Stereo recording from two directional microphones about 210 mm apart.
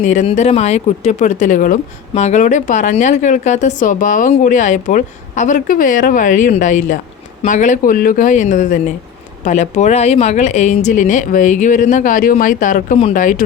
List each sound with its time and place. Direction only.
0.0 s speech: 35° left (ahead or behind)